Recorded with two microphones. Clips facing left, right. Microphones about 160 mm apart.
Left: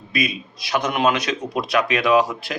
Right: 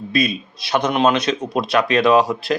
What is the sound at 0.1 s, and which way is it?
Speech, 30° right (ahead or behind).